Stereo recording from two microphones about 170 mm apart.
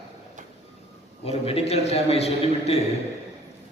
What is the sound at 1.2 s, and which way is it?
A man's voice, 35° left (ahead or behind).